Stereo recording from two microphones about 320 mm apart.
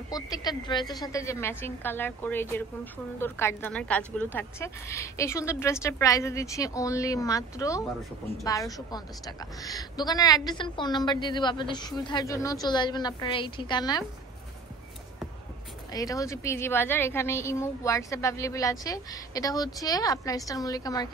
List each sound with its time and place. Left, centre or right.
0.1 s a woman's voice: centre
15.9 s a woman's voice: centre